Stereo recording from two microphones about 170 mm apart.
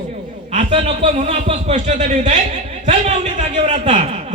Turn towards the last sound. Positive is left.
turn(degrees=-40)  # may be behind; listen again after turning